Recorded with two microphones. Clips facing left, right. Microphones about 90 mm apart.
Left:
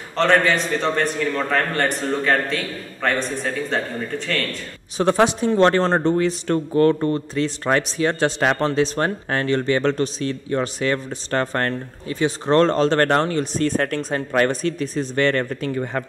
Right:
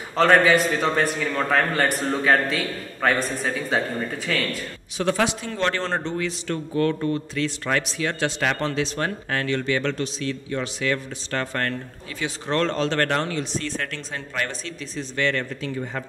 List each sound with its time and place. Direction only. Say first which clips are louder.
0.1 s a man's voice: right 1 dB; 5° right (ahead or behind)
4.9 s a man's voice: left 5 dB; 35° left (ahead or behind); by 16.0 s 55° left (ahead or behind)